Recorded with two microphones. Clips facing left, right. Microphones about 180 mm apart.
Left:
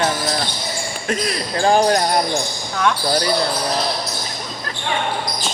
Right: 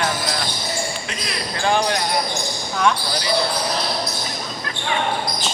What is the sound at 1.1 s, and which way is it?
Speech, 45° left (ahead or behind).